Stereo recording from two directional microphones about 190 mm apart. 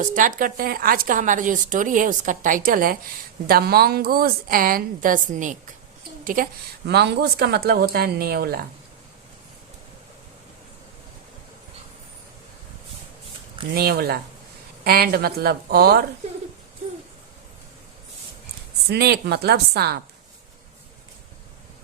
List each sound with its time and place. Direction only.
0.0 s a woman's voice: 45° right (ahead or behind)
13.7 s a woman's voice: 55° right (ahead or behind)
18.9 s speech: 55° right (ahead or behind)